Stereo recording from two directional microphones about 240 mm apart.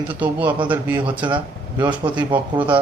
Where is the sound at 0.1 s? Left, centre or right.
Centre.